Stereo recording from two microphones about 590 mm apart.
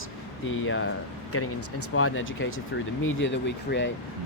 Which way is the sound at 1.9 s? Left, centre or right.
Left.